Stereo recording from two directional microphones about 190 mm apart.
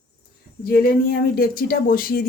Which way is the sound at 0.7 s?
55° left (ahead or behind).